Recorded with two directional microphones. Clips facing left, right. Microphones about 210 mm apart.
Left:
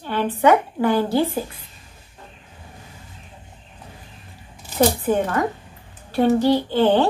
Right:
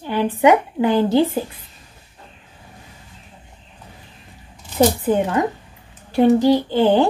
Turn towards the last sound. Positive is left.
turn(degrees=-15)  # may be behind; listen again after turning